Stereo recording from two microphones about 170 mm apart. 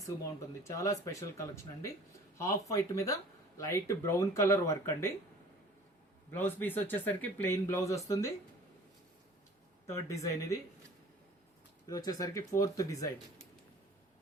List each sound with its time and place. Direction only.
0.7 s speech: 20° left (ahead or behind)
6.3 s speech: 10° left (ahead or behind)
9.8 s speech: 15° left (ahead or behind)
11.9 s speech: 20° left (ahead or behind)